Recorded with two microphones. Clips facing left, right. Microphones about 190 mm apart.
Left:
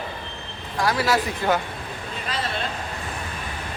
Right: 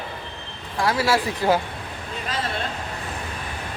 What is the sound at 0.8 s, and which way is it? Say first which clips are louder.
Speech: right 1 dB; 25° right (ahead or behind).